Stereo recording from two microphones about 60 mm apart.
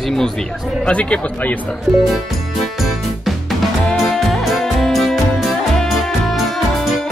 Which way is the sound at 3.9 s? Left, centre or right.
Centre.